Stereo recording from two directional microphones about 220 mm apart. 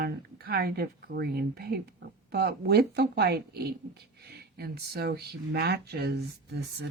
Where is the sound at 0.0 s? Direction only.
45° right (ahead or behind).